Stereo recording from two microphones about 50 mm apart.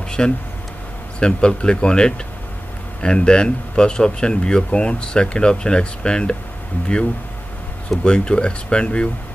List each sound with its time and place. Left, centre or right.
0.2 s speech: centre
8.0 s speech: centre